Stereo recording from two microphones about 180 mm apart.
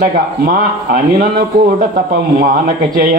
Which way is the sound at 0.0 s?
55° right (ahead or behind).